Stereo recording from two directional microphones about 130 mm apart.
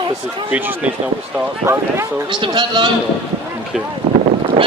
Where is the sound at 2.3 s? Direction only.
35° right (ahead or behind).